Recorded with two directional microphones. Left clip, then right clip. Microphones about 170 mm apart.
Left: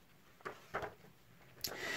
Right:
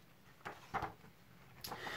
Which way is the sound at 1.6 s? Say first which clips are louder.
Left 3 dB; 35° left (ahead or behind).